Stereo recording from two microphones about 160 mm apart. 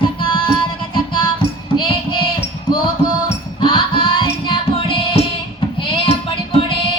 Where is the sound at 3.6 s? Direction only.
30° left (ahead or behind).